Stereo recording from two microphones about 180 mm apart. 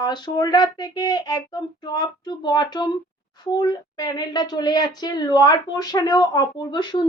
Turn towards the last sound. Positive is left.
turn(degrees=25)  # may be behind; listen again after turning